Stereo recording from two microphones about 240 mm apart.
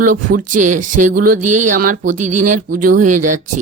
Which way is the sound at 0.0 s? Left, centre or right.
Right.